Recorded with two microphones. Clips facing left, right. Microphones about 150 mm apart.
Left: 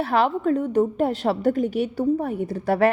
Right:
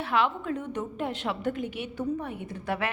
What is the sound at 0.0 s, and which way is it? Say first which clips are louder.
A woman's voice: left 7 dB; 40° left (ahead or behind).